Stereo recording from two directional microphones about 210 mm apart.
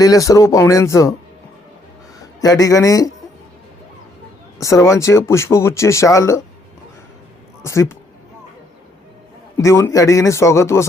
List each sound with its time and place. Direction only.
0.0 s speech: 15° left (ahead or behind)
2.4 s speech: 15° left (ahead or behind)
4.6 s speech: 15° left (ahead or behind)
7.6 s speech: 15° left (ahead or behind)
9.6 s speech: 15° left (ahead or behind)